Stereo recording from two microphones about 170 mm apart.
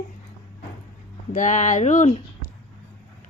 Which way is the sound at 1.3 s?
45° left (ahead or behind).